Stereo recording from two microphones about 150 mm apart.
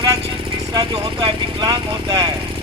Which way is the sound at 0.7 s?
30° right (ahead or behind).